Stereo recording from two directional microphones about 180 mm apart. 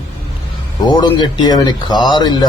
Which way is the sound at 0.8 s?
25° left (ahead or behind).